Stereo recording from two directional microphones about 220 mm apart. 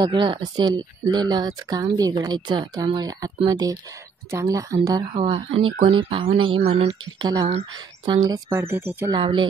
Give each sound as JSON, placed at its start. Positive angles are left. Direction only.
{"t": 0.0, "sound": "speech", "side_deg": -20}